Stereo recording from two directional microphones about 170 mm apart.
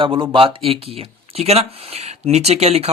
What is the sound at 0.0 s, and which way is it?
Speech, 30° right (ahead or behind).